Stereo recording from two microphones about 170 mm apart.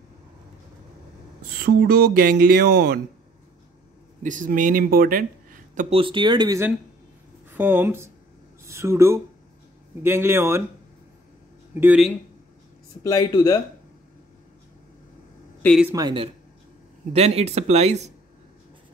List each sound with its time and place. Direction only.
1.5 s speech: 65° right (ahead or behind)
4.2 s speech: 50° right (ahead or behind)
5.9 s speech: 30° right (ahead or behind)
7.5 s speech: 10° right (ahead or behind)
11.7 s speech: 10° right (ahead or behind)
13.0 s speech: 20° left (ahead or behind)
15.9 s speech: 25° right (ahead or behind)
17.1 s speech: 35° right (ahead or behind)